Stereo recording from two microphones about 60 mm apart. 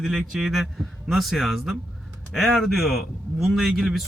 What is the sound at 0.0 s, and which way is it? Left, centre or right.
Speech, centre.